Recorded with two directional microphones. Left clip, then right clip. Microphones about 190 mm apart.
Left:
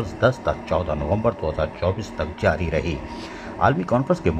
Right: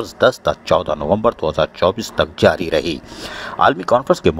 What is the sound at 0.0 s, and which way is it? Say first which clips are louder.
Speech: right 6 dB; 40° right (ahead or behind).